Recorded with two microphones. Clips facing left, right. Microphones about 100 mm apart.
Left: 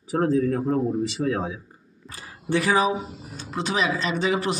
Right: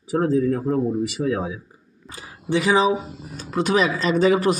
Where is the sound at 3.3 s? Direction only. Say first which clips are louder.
Right 6 dB; 45° right (ahead or behind).